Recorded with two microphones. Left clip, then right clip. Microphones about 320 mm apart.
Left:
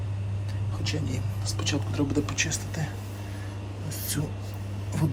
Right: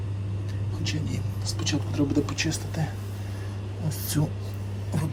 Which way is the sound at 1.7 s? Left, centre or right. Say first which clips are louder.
Right 3 dB; centre.